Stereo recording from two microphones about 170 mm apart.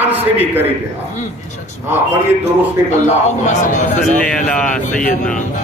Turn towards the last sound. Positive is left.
turn(degrees=45)  # may be behind; listen again after turning